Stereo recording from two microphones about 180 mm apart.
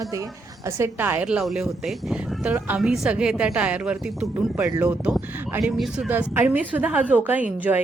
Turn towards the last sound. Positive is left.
turn(degrees=-10)  # may be behind; listen again after turning